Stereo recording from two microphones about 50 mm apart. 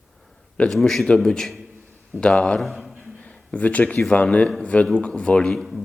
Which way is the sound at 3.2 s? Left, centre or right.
Left.